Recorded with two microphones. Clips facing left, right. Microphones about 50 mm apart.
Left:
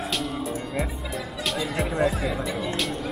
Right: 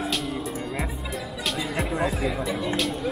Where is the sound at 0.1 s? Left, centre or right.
Centre.